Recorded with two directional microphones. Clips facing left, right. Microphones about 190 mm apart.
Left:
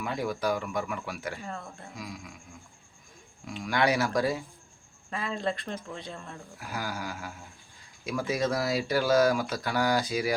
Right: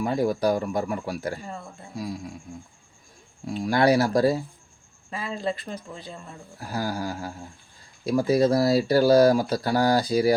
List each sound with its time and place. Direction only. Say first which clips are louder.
0.0 s speech: right 7 dB; 40° right (ahead or behind)
1.5 s speech: right 2 dB; 5° right (ahead or behind)
2.0 s speech: right 11 dB; 35° right (ahead or behind)
3.4 s speech: right 6 dB; 35° right (ahead or behind)
5.1 s speech: right 2 dB; 5° right (ahead or behind)
6.6 s speech: right 7 dB; 35° right (ahead or behind)